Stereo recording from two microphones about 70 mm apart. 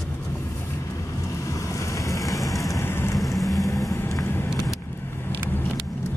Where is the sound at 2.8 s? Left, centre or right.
Left.